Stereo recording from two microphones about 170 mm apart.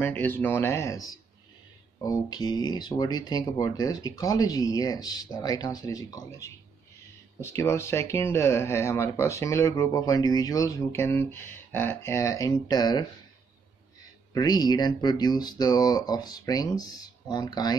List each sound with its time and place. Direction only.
0.0 s speech: 10° left (ahead or behind)
14.3 s speech: 25° left (ahead or behind)